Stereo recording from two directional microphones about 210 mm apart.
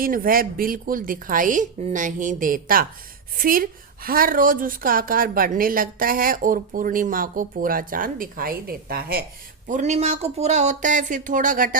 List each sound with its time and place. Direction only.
0.0 s a woman's voice: 40° right (ahead or behind)
9.6 s a woman's voice: 35° right (ahead or behind)